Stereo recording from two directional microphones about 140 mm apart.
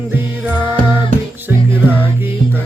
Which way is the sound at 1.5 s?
15° right (ahead or behind).